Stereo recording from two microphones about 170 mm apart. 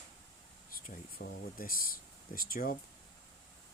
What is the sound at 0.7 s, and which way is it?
Speech, 55° left (ahead or behind).